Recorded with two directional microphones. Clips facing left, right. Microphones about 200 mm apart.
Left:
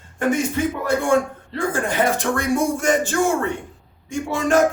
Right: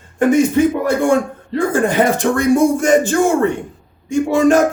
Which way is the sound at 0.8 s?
15° right (ahead or behind).